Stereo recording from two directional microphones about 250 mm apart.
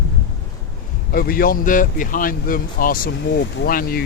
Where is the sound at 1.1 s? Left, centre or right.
Left.